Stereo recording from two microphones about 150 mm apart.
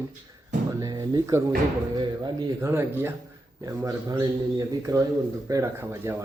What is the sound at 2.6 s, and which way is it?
Speech, 15° right (ahead or behind).